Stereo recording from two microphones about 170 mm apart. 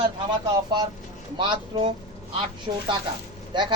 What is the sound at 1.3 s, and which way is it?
Speech, 25° right (ahead or behind).